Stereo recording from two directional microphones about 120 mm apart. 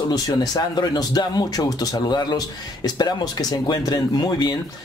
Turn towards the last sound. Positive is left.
turn(degrees=35)  # may be behind; listen again after turning